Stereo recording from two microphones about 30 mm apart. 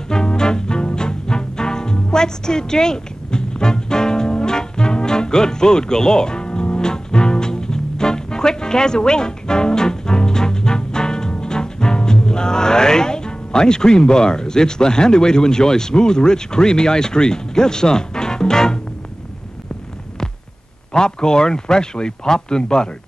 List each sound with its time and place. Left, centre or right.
0.1 s music: left
20.9 s speech: left